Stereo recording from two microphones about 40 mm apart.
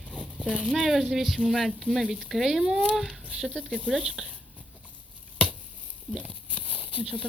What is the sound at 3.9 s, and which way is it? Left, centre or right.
Speech, right.